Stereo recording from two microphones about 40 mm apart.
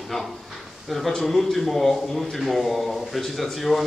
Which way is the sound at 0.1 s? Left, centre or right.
Centre.